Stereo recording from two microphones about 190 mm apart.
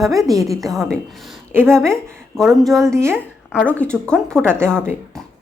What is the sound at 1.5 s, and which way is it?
Speech, 10° right (ahead or behind).